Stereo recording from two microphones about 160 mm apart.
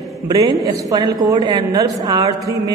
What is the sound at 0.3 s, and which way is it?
A man's voice, 25° right (ahead or behind).